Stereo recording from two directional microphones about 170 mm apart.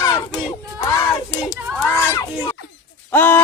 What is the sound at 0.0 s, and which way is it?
Crowd, 25° left (ahead or behind).